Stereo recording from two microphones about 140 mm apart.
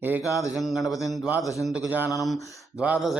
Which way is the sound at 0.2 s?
25° left (ahead or behind).